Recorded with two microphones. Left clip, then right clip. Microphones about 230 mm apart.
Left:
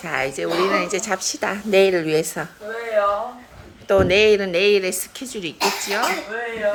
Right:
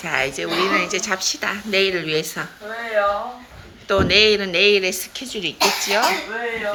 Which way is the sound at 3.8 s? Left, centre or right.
Centre.